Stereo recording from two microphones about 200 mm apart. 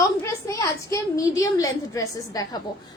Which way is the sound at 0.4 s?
15° left (ahead or behind).